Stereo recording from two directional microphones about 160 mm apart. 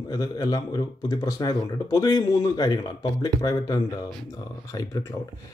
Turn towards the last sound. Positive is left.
turn(degrees=20)  # may be behind; listen again after turning